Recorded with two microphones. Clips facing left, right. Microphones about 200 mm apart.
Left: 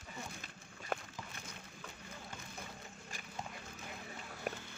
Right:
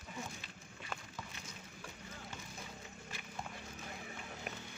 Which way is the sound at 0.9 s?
55° left (ahead or behind).